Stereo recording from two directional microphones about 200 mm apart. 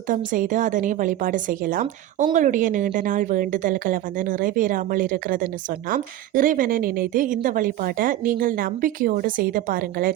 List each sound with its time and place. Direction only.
0.1 s a woman's voice: 40° right (ahead or behind)